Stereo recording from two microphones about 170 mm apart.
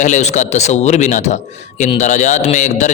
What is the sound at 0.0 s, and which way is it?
Speech, 45° left (ahead or behind).